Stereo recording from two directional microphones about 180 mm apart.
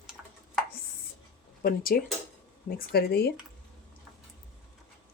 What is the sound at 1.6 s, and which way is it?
Speech, 55° left (ahead or behind).